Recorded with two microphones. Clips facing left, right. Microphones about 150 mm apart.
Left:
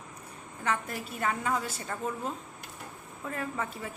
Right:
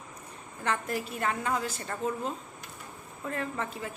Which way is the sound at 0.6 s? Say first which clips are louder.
Right 1 dB; centre (ahead or behind).